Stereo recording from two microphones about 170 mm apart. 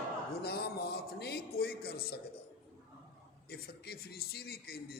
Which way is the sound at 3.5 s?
65° left (ahead or behind).